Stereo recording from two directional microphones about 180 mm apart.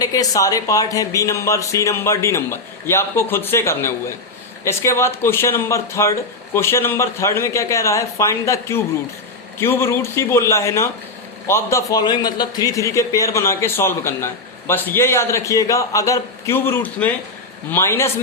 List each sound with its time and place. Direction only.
0.0 s a man's voice: 20° left (ahead or behind)